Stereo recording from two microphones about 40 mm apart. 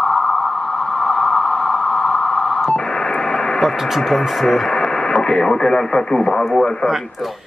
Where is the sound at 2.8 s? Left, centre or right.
Left.